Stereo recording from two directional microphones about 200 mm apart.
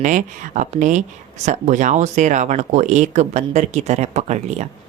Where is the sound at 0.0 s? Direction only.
40° right (ahead or behind).